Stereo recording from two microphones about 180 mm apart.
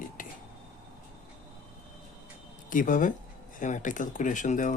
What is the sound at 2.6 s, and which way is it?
Speech, 45° left (ahead or behind).